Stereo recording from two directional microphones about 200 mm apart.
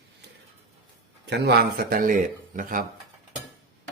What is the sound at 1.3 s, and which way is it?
Speech, 55° right (ahead or behind).